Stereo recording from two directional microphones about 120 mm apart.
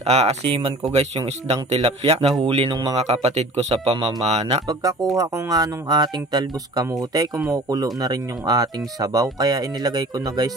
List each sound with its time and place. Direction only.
0.0 s speech: 65° right (ahead or behind); by 3.0 s 40° right (ahead or behind)
3.0 s speech: 60° right (ahead or behind)
5.1 s speech: 30° right (ahead or behind)